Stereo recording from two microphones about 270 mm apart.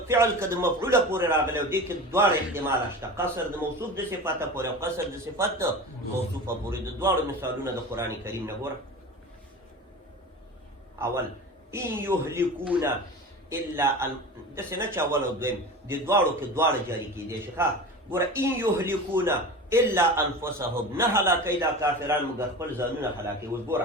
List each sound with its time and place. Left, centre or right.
0.1 s a man's voice: centre
11.7 s a man's voice: centre